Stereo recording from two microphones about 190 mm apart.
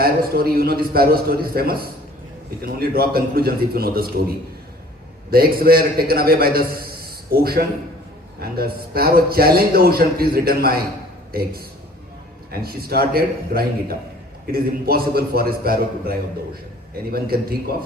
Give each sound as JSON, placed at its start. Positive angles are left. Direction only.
{"t": 0.0, "sound": "a man's voice", "side_deg": -50}
{"t": 5.3, "sound": "a man's voice", "side_deg": -50}